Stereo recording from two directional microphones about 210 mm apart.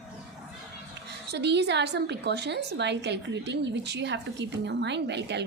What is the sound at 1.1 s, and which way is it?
A woman's voice, 55° right (ahead or behind).